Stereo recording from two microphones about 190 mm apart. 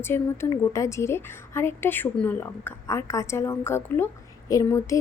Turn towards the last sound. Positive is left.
turn(degrees=15)  # may be behind; listen again after turning